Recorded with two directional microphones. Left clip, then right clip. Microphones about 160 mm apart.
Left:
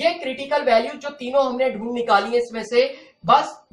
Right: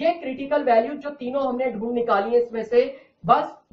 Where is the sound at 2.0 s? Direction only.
10° right (ahead or behind).